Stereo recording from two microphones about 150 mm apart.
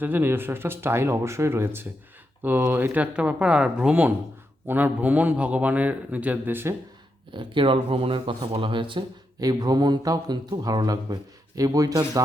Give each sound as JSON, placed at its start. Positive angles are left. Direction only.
{"t": 0.0, "sound": "a man's voice", "side_deg": -15}
{"t": 7.3, "sound": "speech", "side_deg": -35}